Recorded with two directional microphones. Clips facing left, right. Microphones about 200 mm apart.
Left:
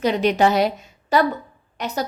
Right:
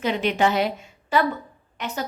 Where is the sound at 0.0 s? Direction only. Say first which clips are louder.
Left 4 dB; 40° left (ahead or behind).